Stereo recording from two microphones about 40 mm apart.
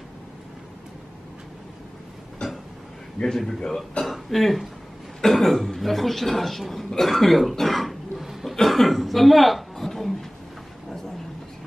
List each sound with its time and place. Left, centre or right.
2.4 s a sound: left
3.2 s a man's voice: centre
8.5 s throat clearing: centre